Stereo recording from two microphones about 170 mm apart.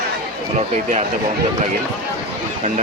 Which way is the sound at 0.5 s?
40° right (ahead or behind).